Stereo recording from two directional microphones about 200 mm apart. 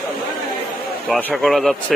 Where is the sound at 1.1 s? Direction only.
Centre (ahead or behind).